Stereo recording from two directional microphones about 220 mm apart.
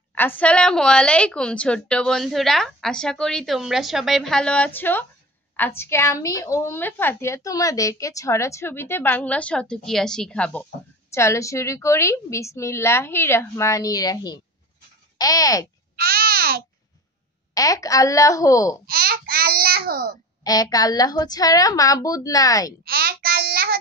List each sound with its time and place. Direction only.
0.1 s a woman's voice: 10° left (ahead or behind)
16.0 s babbling: 45° right (ahead or behind)
17.6 s a woman's voice: 15° left (ahead or behind)
18.9 s babbling: 45° right (ahead or behind)
20.4 s a woman's voice: 15° left (ahead or behind)
22.8 s child singing: 45° right (ahead or behind)